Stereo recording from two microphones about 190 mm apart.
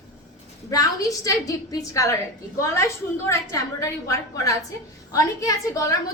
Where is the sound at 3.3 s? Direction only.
15° left (ahead or behind).